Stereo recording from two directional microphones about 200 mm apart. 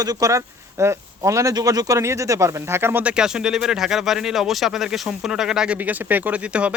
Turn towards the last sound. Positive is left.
turn(degrees=-5)  # may be behind; listen again after turning